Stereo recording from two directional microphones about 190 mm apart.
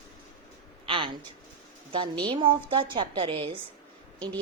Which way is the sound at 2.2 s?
25° right (ahead or behind).